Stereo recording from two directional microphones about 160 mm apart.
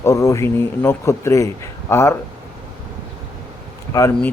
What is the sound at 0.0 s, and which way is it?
Speech, 20° left (ahead or behind).